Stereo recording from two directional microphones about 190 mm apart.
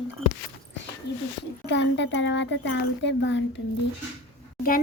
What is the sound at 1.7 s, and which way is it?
A child's voice, 65° left (ahead or behind).